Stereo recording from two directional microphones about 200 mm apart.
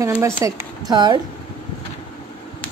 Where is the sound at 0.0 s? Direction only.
15° right (ahead or behind).